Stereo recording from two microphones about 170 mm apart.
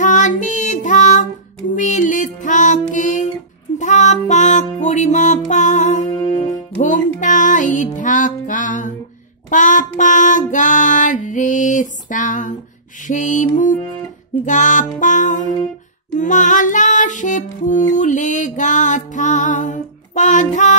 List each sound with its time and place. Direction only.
0.0 s child singing: 50° left (ahead or behind)
1.8 s music: 45° left (ahead or behind)
6.1 s music: 25° left (ahead or behind)
6.8 s music: 50° left (ahead or behind)
9.5 s child singing: 50° left (ahead or behind)
13.0 s music: 50° left (ahead or behind)